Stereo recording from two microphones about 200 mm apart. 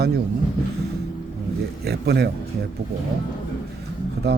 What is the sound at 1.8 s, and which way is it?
Speech, 55° right (ahead or behind).